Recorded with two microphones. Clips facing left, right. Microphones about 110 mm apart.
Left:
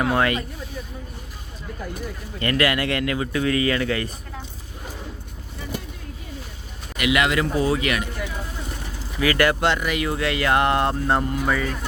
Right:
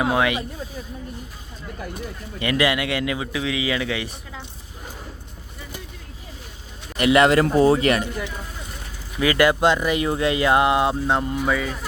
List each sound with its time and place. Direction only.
0.0 s speech: 10° right (ahead or behind)
2.4 s speech: 15° right (ahead or behind)
6.9 s a man's voice: 35° right (ahead or behind)
9.2 s speech: 20° right (ahead or behind)
10.7 s speech: 5° right (ahead or behind)